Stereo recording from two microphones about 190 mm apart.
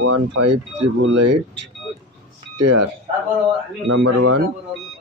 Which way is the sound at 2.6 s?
65° right (ahead or behind).